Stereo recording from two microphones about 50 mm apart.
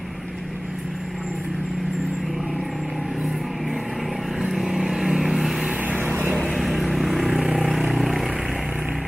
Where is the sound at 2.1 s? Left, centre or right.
Centre.